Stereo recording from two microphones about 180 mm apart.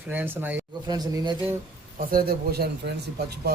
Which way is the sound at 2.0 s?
55° right (ahead or behind).